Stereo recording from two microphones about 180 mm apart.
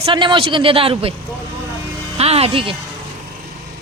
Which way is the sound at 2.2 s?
35° right (ahead or behind).